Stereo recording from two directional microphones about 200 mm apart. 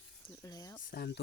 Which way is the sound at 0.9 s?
50° left (ahead or behind).